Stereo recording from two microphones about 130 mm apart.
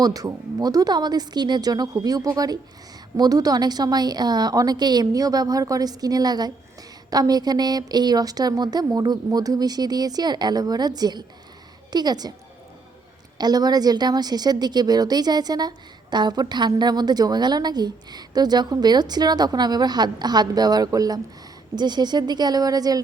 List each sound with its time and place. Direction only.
0.0 s a woman's voice: 30° right (ahead or behind)
13.4 s a woman's voice: 30° right (ahead or behind)